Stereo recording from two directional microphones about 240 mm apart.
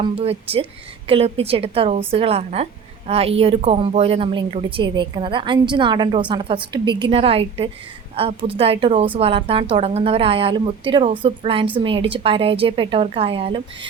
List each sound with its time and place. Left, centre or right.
0.0 s a woman's voice: right